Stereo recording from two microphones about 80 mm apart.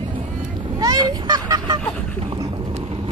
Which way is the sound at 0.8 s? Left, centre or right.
Right.